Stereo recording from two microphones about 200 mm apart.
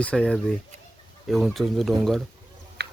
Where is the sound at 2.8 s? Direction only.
55° right (ahead or behind).